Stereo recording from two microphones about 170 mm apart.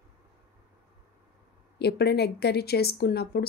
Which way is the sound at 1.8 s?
75° left (ahead or behind).